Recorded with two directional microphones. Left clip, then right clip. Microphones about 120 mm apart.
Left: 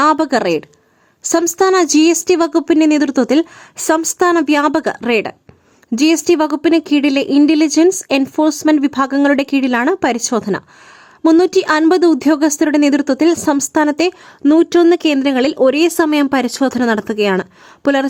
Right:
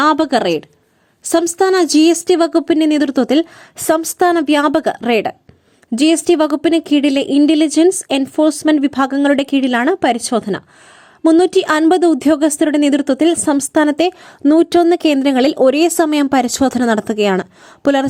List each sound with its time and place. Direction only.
0.0 s a woman's voice: 25° right (ahead or behind)
14.5 s speech: 45° right (ahead or behind)